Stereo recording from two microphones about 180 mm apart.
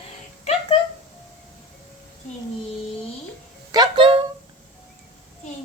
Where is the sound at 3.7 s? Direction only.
25° right (ahead or behind).